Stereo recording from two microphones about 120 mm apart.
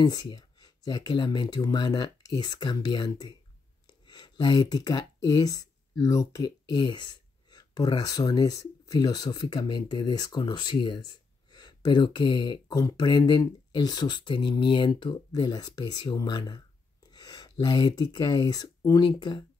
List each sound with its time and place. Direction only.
0.0 s speech: 35° left (ahead or behind)